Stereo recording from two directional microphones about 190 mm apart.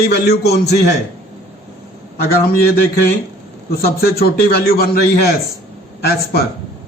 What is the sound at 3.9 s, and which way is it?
Speech, 55° left (ahead or behind).